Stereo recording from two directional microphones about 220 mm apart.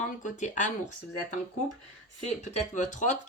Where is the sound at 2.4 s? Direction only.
30° left (ahead or behind).